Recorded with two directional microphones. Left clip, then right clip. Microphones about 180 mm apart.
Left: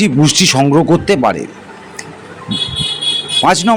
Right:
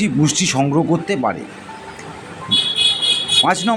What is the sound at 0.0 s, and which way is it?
Speech, 25° left (ahead or behind).